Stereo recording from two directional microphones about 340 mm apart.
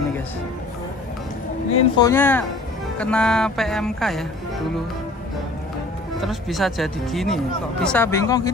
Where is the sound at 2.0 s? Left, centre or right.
Centre.